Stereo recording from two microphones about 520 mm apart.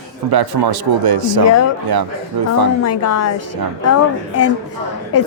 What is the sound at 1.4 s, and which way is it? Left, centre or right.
A woman's voice, left.